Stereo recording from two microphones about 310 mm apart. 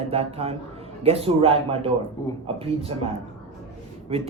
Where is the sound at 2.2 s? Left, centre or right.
Centre.